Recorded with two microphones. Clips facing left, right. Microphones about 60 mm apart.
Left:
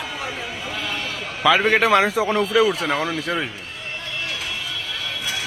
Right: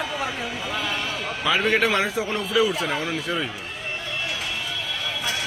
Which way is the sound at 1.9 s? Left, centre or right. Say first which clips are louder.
Left 6 dB; left.